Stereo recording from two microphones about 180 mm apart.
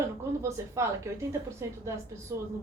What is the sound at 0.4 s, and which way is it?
A woman's voice, 15° right (ahead or behind).